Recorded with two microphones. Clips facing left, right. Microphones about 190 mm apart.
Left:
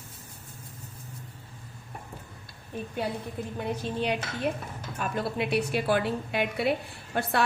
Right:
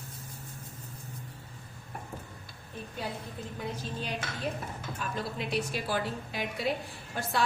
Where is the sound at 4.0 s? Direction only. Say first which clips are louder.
Left 7 dB; 65° left (ahead or behind).